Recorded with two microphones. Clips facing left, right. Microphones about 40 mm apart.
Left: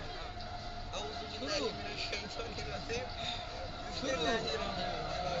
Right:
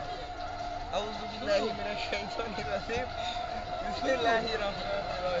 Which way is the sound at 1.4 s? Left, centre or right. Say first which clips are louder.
Right 8 dB; right.